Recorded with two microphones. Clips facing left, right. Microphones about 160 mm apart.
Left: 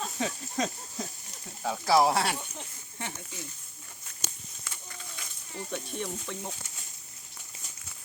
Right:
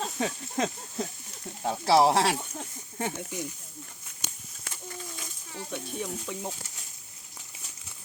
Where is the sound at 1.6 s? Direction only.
25° right (ahead or behind).